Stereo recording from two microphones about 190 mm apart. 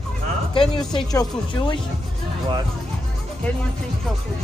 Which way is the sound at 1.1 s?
25° left (ahead or behind).